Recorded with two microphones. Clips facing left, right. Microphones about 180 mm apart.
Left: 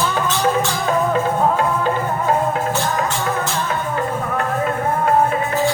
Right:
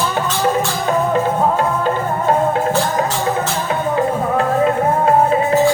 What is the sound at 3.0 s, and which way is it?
Music, 25° right (ahead or behind).